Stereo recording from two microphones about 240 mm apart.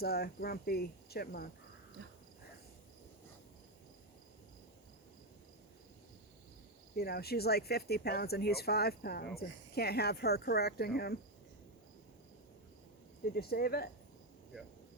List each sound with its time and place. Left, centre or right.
0.0 s speech: left
6.9 s speech: left
13.3 s speech: left